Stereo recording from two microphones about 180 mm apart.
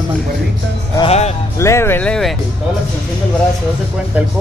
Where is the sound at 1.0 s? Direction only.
35° left (ahead or behind).